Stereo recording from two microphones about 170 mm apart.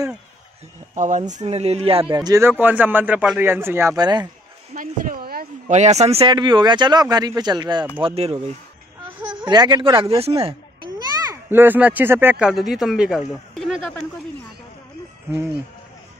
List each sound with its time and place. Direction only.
0.9 s speech: 45° right (ahead or behind)
2.1 s a man's voice: 20° right (ahead or behind)
4.7 s speech: 55° right (ahead or behind)
5.7 s speech: 40° right (ahead or behind)
11.4 s a man's voice: 10° right (ahead or behind)